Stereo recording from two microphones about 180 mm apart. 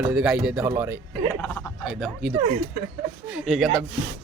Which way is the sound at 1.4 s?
10° left (ahead or behind).